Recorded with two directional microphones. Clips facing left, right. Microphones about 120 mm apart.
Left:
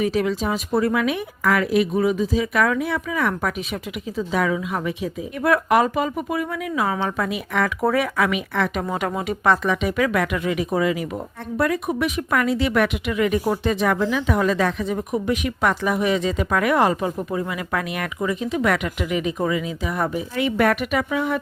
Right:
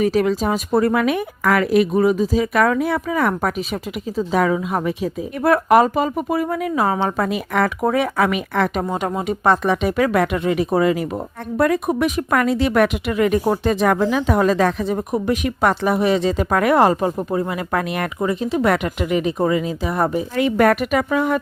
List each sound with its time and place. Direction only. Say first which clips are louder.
0.0 s speech: right 4 dB; 40° right (ahead or behind)
7.8 s speech: right 2 dB; 20° right (ahead or behind)
8.3 s speech: right 3 dB; 40° right (ahead or behind)
8.8 s speech: right 2 dB; 25° right (ahead or behind); by 21.4 s 50° right (ahead or behind)